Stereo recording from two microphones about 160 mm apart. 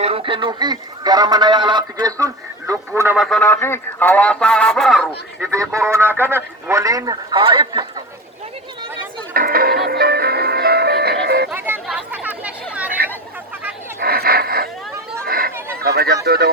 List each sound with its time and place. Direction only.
0.0 s speech: 35° right (ahead or behind); by 3.2 s 15° right (ahead or behind)
3.2 s speech: 5° left (ahead or behind)
5.5 s speech: 20° right (ahead or behind)
9.3 s music: 65° right (ahead or behind); by 11.4 s 90° right
11.5 s chatter: 10° right (ahead or behind)
14.0 s dog: 70° right (ahead or behind)
15.3 s a sound: 65° right (ahead or behind)
15.8 s a sound: 80° right